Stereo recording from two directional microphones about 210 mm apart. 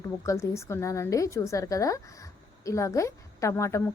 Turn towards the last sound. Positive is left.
turn(degrees=15)  # may be behind; listen again after turning